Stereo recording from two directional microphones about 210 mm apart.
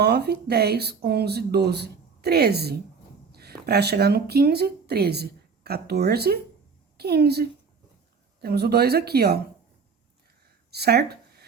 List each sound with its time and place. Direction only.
0.0 s a woman's voice: 50° right (ahead or behind)
10.7 s speech: 50° right (ahead or behind)